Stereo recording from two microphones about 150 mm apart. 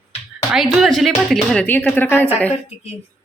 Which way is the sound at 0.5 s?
Centre (ahead or behind).